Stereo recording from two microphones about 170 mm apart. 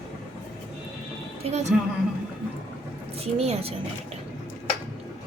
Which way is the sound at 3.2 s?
35° right (ahead or behind).